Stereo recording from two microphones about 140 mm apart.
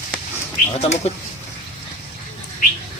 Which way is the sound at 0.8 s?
50° left (ahead or behind).